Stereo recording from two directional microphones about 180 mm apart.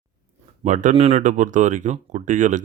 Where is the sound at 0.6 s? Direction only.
45° right (ahead or behind).